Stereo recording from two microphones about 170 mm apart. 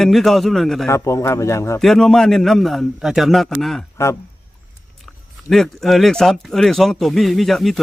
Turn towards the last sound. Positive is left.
turn(degrees=0)  # may be behind; listen again after turning